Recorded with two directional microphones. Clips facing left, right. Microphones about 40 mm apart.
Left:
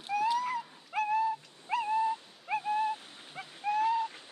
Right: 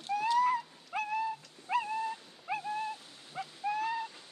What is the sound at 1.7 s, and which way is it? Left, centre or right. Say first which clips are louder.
Owl: even; centre.